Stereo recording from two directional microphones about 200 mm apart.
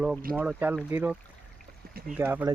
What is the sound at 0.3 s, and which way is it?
Speech, 10° right (ahead or behind).